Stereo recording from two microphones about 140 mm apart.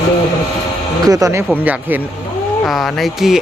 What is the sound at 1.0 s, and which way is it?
Speech, 25° right (ahead or behind).